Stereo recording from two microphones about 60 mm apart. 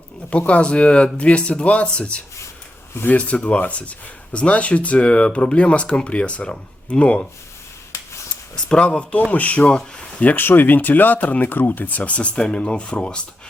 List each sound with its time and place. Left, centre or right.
0.3 s speech: left
8.5 s speech: centre
9.6 s speech: centre
10.2 s speech: left; by 13.2 s centre